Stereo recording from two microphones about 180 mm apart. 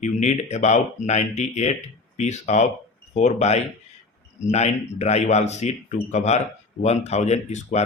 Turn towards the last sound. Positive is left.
turn(degrees=40)  # may be behind; listen again after turning